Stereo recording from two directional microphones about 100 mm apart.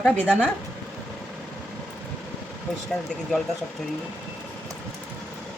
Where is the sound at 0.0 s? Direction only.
15° left (ahead or behind).